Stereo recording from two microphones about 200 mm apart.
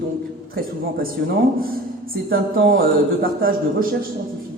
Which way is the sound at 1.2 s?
55° right (ahead or behind).